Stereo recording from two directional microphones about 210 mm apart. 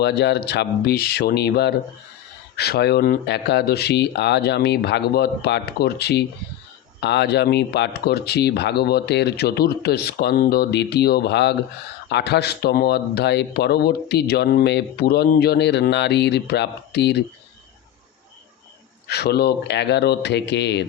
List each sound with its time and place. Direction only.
0.0 s speech: 55° left (ahead or behind)
19.0 s speech: 50° left (ahead or behind)